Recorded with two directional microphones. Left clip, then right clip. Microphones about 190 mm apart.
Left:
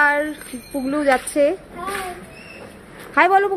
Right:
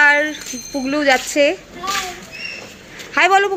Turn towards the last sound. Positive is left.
turn(degrees=5)  # may be behind; listen again after turning